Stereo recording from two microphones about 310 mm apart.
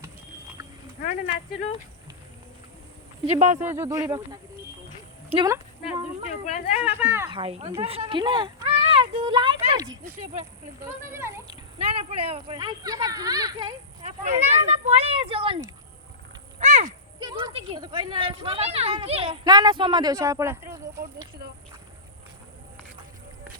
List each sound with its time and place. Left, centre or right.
3.2 s speech: right
3.6 s speech: centre
6.4 s speech: left
6.9 s speech: centre